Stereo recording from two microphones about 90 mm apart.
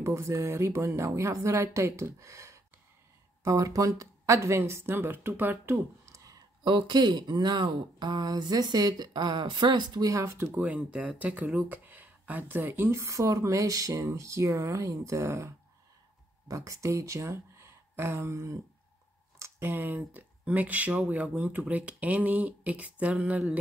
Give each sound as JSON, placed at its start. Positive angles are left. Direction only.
{"t": 0.0, "sound": "speech", "side_deg": -30}
{"t": 6.0, "sound": "a sound", "side_deg": -35}
{"t": 6.6, "sound": "speech", "side_deg": -55}
{"t": 10.2, "sound": "speech", "side_deg": -30}
{"t": 10.6, "sound": "speech", "side_deg": -15}